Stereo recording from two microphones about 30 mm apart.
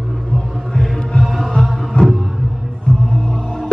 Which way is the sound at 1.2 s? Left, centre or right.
Centre.